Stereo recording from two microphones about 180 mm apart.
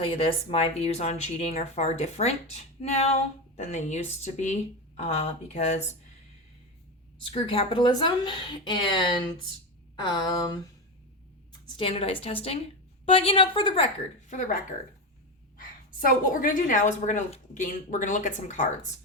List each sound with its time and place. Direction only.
0.0 s speech: 30° left (ahead or behind)
7.2 s speech: 30° left (ahead or behind)
11.8 s speech: 30° left (ahead or behind)
14.3 s a woman's voice: 45° left (ahead or behind)